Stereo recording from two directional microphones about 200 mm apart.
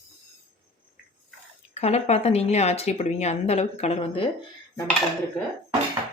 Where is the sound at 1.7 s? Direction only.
30° left (ahead or behind).